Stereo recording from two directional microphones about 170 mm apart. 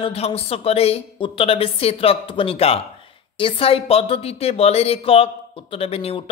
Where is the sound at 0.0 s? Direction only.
35° left (ahead or behind).